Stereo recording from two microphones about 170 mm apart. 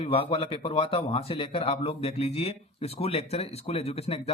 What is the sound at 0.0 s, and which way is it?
A man's voice, 35° left (ahead or behind).